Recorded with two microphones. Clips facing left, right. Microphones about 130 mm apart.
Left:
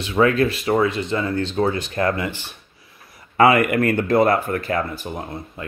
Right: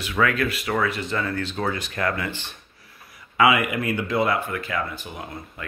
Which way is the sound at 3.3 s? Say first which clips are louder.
Left 5 dB; 45° left (ahead or behind).